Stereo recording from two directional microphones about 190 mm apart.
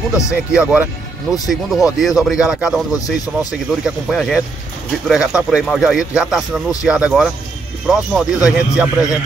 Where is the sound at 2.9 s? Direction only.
20° left (ahead or behind).